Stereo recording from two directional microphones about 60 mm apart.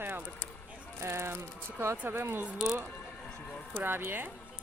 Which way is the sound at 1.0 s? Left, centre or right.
Right.